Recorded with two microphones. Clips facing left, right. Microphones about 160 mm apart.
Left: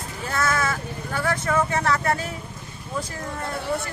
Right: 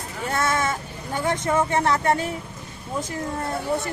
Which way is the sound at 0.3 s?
25° right (ahead or behind).